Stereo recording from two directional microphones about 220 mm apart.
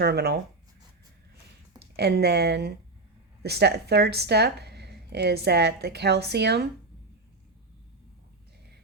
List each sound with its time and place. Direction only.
0.0 s a woman's voice: 45° right (ahead or behind)
2.0 s a woman's voice: 45° right (ahead or behind)